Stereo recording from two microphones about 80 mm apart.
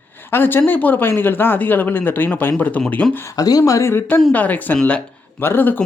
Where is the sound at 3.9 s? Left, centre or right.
Left.